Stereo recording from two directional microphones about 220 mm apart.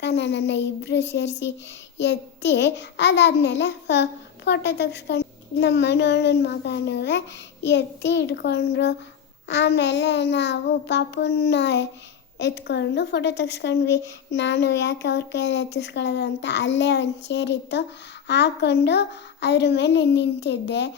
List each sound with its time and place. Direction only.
0.0 s speech: 50° left (ahead or behind)